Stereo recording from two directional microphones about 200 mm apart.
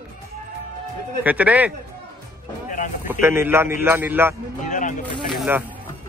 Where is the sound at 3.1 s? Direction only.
10° right (ahead or behind).